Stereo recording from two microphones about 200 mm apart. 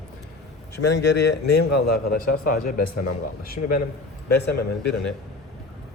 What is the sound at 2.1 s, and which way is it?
A man's voice, 45° left (ahead or behind).